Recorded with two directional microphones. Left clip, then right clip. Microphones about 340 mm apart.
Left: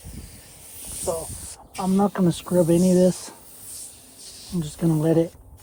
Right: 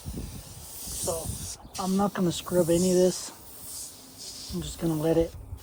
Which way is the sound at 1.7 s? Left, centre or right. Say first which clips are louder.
Left 5 dB; left.